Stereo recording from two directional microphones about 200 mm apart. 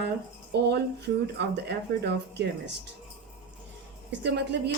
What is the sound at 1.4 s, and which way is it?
A woman's voice, 55° right (ahead or behind).